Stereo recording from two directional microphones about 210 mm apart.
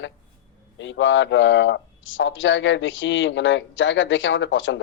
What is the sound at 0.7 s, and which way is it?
Speech, 60° left (ahead or behind).